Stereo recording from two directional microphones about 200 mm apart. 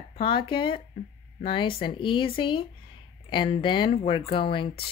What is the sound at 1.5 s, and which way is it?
Speech, 25° left (ahead or behind).